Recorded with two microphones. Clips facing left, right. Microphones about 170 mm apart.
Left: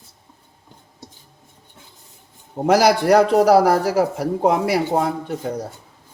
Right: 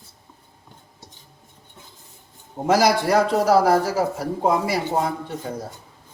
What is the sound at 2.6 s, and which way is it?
A man's voice, 65° left (ahead or behind).